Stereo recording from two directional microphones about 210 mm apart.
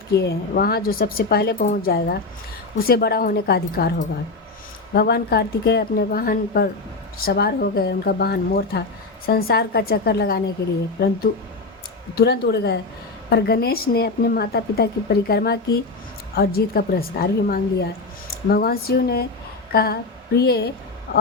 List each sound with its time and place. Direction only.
0.1 s speech: 50° left (ahead or behind)
12.1 s speech: 50° left (ahead or behind)
19.7 s a sound: 50° left (ahead or behind)
21.1 s speech: 45° left (ahead or behind)